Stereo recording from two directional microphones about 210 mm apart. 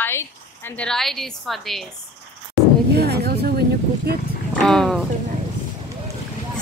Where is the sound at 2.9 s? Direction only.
50° right (ahead or behind).